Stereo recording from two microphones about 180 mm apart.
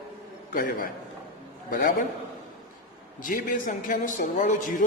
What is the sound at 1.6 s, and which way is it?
Speech, 50° left (ahead or behind).